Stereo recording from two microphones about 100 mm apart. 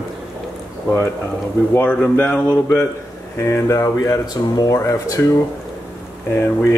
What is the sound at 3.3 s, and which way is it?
Speech, 30° left (ahead or behind).